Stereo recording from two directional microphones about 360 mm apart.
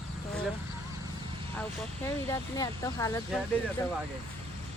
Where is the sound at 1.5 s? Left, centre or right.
Centre.